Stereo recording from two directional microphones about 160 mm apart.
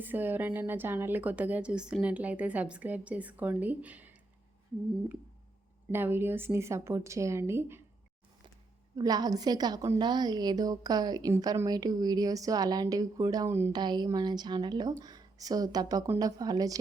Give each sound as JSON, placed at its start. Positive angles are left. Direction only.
{"t": 0.0, "sound": "a woman's voice", "side_deg": -10}
{"t": 5.9, "sound": "a woman's voice", "side_deg": -15}
{"t": 9.0, "sound": "a woman's voice", "side_deg": -25}
{"t": 13.7, "sound": "a woman's voice", "side_deg": -25}